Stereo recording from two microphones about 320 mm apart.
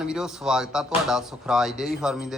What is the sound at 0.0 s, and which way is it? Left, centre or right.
A man's voice, centre.